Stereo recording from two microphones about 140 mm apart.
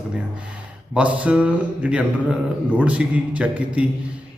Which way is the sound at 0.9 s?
10° right (ahead or behind).